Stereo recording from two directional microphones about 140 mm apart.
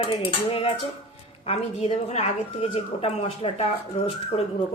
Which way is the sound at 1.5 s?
45° left (ahead or behind).